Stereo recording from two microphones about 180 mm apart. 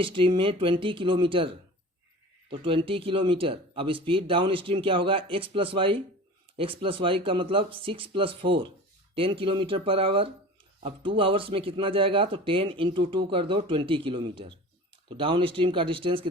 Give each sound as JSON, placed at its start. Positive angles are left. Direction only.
{"t": 0.0, "sound": "speech", "side_deg": -30}
{"t": 2.5, "sound": "speech", "side_deg": -30}